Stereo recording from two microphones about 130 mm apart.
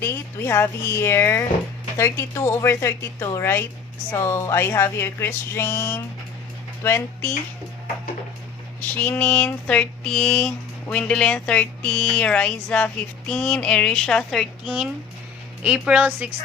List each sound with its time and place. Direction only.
0.0 s speech: 20° left (ahead or behind)
9.0 s speech: 15° left (ahead or behind)
14.6 s speech: 5° right (ahead or behind)